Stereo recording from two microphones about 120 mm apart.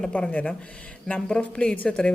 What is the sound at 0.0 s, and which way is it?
A woman's voice, 10° left (ahead or behind).